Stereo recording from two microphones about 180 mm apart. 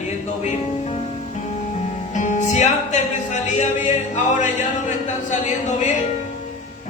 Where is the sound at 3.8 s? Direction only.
45° left (ahead or behind).